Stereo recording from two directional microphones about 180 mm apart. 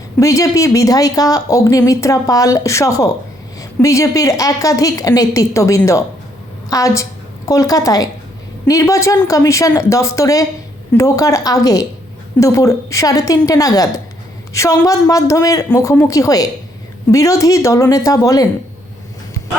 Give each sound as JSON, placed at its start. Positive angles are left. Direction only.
{"t": 0.2, "sound": "a woman's voice", "side_deg": 15}